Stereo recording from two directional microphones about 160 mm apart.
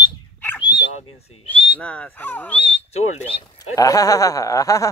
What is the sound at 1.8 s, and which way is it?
Speech, 10° left (ahead or behind).